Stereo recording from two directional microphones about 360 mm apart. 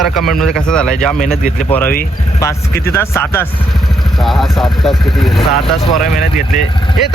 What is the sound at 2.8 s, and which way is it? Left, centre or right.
Speech, centre.